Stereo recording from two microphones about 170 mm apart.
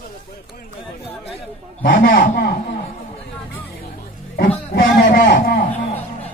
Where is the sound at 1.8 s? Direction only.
60° left (ahead or behind).